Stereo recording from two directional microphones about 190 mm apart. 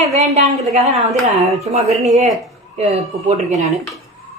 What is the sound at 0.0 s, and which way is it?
A man's voice, 35° right (ahead or behind).